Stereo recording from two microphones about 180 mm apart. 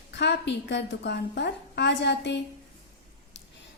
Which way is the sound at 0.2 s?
75° left (ahead or behind).